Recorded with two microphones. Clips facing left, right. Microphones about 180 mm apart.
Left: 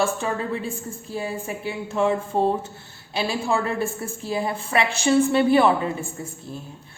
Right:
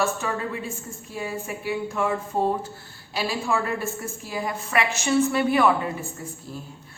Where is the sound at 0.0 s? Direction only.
30° left (ahead or behind).